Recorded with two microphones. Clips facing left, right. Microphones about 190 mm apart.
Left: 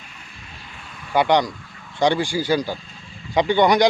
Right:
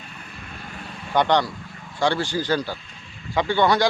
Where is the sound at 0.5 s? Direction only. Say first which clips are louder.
Right 5 dB; 50° right (ahead or behind).